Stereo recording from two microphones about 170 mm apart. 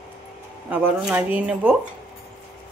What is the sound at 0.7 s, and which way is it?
Speech, 10° right (ahead or behind).